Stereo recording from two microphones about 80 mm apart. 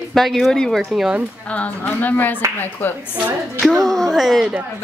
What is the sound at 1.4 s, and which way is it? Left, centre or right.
A woman's voice, centre.